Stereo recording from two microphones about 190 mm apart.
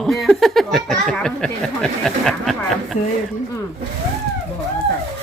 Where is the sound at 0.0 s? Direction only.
Centre (ahead or behind).